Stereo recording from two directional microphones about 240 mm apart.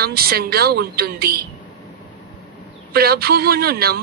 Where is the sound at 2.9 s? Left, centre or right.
Right.